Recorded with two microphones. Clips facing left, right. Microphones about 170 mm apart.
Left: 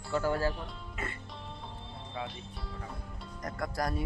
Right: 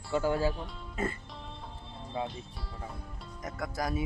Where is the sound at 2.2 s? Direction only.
30° right (ahead or behind).